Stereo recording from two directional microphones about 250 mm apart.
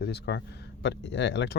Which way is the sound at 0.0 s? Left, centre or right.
Left.